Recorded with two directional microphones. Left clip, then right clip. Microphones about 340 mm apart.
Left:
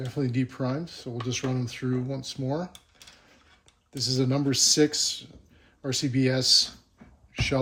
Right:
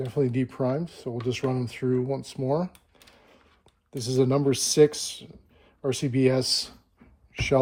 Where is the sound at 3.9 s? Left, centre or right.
Centre.